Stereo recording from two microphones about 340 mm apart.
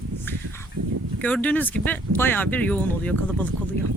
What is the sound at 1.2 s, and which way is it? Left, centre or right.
Speech, centre.